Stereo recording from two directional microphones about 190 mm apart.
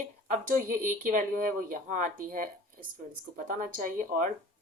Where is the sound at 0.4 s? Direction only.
45° right (ahead or behind).